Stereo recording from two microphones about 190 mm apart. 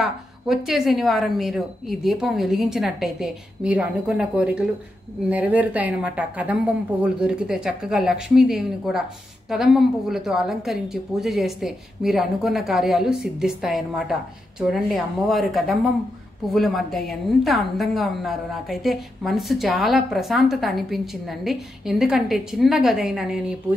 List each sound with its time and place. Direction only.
0.0 s a woman's voice: centre (ahead or behind)